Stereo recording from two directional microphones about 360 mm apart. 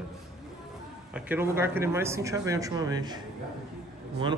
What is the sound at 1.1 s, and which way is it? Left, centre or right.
Speech, centre.